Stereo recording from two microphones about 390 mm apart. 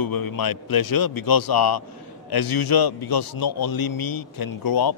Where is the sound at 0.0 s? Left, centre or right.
Left.